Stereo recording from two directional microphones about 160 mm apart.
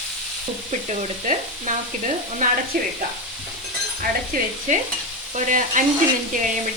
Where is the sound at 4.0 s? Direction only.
60° right (ahead or behind).